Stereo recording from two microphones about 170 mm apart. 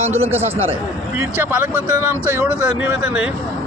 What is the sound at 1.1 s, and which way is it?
Speech, 10° right (ahead or behind).